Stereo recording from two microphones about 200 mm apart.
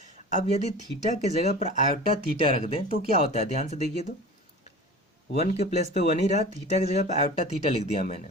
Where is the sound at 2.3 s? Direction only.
45° right (ahead or behind).